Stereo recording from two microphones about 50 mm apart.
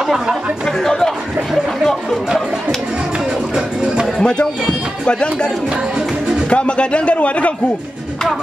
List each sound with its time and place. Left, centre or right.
0.8 s speech: centre
3.5 s music: centre
4.2 s a man's voice: centre
6.5 s a man's voice: left